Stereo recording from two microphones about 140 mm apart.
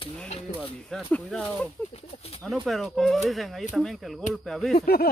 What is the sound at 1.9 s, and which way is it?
Speech, 45° left (ahead or behind).